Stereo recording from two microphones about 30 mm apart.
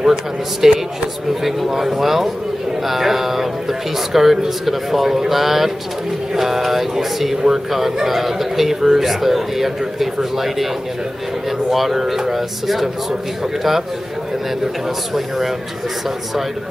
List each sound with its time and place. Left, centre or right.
0.0 s speech: centre
1.7 s speech: centre
11.7 s speech: centre
15.1 s speech: centre